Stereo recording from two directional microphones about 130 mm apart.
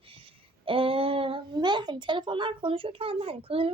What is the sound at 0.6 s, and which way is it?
Speech, 45° right (ahead or behind).